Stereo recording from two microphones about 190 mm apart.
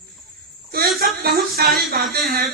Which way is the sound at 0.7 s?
55° right (ahead or behind).